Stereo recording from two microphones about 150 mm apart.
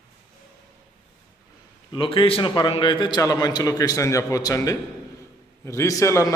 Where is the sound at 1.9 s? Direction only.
35° left (ahead or behind).